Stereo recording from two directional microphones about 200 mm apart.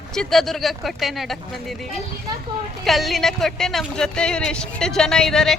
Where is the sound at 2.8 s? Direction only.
Centre (ahead or behind).